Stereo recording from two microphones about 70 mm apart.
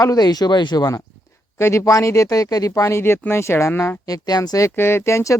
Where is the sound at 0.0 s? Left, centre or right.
Left.